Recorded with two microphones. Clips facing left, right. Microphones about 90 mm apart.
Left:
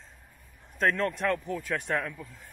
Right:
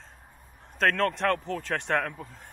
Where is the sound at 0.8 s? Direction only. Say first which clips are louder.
Right 2 dB; 55° right (ahead or behind).